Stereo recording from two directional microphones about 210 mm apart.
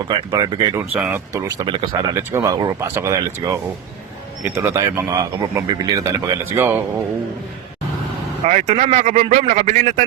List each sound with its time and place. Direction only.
0.1 s speech: 20° right (ahead or behind)
0.9 s speech: 5° right (ahead or behind)
8.4 s speech: 35° right (ahead or behind)